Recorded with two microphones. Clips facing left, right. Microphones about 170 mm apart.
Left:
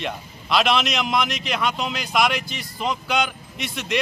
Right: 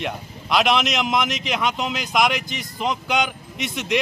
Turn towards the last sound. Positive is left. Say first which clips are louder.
# right 3 dB
turn(degrees=-20)  # may be behind; listen again after turning